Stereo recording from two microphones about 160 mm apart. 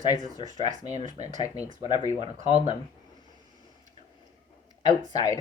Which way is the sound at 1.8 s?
25° left (ahead or behind).